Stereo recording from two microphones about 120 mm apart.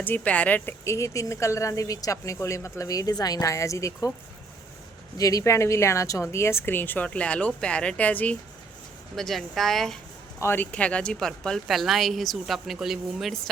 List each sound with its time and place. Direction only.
0.0 s speech: 15° left (ahead or behind)
5.1 s speech: 30° left (ahead or behind); by 8.4 s 15° left (ahead or behind)
9.1 s speech: centre (ahead or behind)
10.4 s speech: 15° left (ahead or behind); by 13.4 s centre (ahead or behind)